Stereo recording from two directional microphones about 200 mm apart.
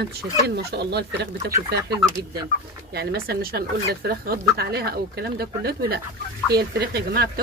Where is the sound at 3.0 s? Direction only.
50° right (ahead or behind).